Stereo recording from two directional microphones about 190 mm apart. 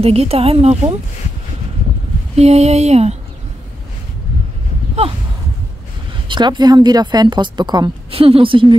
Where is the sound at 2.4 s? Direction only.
35° right (ahead or behind).